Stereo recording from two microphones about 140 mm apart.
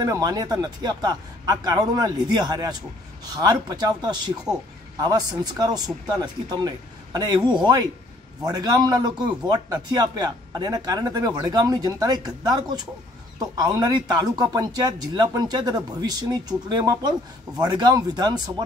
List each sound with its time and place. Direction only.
0.0 s speech: 30° right (ahead or behind)
5.4 s speech: 30° right (ahead or behind)